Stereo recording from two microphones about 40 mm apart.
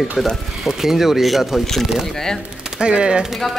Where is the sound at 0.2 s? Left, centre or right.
Centre.